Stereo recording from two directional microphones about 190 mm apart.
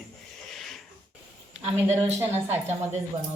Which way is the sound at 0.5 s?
Centre (ahead or behind).